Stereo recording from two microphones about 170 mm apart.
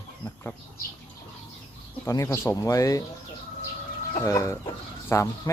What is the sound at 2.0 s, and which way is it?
Speech, 20° left (ahead or behind).